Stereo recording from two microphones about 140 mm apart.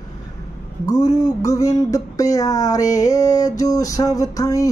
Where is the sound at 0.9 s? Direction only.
25° left (ahead or behind).